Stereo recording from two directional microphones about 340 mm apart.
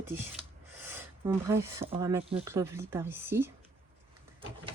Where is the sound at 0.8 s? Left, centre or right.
Centre.